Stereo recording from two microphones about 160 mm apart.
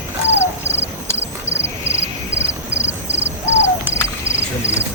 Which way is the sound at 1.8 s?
35° right (ahead or behind).